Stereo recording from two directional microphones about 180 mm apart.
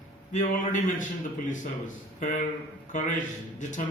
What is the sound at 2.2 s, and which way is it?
A man's voice, 40° left (ahead or behind).